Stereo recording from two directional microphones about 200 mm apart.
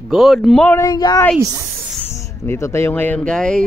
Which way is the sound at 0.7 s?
20° left (ahead or behind).